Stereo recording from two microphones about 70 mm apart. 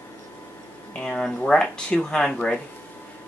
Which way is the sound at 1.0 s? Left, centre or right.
Centre.